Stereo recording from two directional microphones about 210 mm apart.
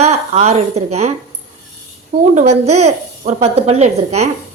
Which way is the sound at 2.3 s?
30° right (ahead or behind).